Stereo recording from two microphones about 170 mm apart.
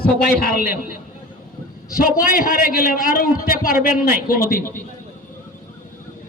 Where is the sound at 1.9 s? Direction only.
55° left (ahead or behind).